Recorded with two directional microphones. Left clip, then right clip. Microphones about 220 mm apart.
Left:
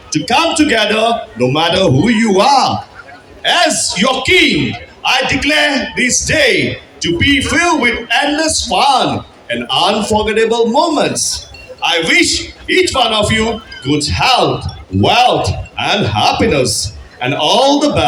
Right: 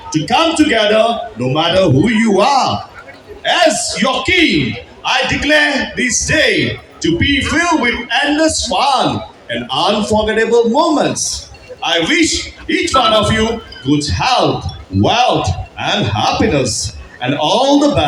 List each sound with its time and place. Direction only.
0.1 s a man's voice: 45° left (ahead or behind)